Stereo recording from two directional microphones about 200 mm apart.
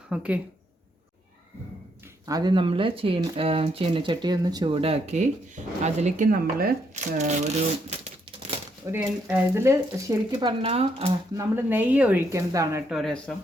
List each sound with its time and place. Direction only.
0.1 s speech: 5° right (ahead or behind)
2.2 s speech: 20° right (ahead or behind); by 7.9 s 35° right (ahead or behind)
8.9 s speech: 10° right (ahead or behind)
10.6 s speech: 30° right (ahead or behind)
11.3 s speech: 10° right (ahead or behind)
12.9 s speech: centre (ahead or behind)